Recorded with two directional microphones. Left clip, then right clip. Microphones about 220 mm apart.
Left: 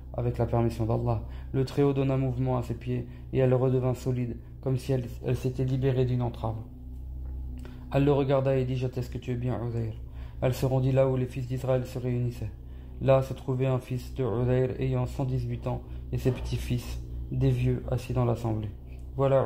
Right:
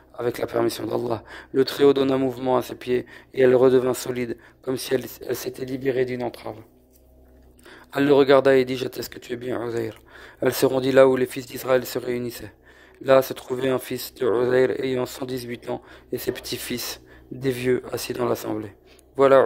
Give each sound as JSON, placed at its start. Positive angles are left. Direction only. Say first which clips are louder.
{"t": 0.2, "sound": "speech", "louder": "right 6 dB", "side_deg": -40}
{"t": 8.0, "sound": "speech", "louder": "right 10 dB", "side_deg": -45}